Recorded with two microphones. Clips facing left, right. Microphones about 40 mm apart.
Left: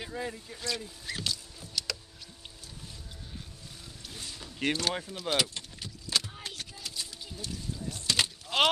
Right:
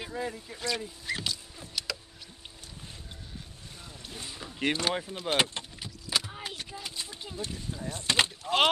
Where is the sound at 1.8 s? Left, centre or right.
Centre.